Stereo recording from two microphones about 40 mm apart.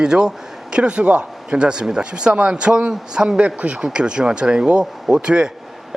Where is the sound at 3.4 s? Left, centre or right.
Right.